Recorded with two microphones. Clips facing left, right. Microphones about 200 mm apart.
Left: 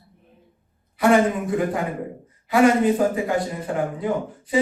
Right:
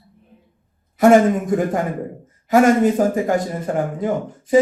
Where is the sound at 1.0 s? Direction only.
45° right (ahead or behind).